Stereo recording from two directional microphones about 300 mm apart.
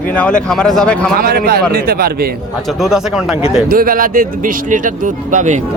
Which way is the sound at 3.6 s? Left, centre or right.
Right.